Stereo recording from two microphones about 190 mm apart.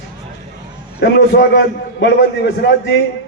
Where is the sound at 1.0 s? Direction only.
60° left (ahead or behind).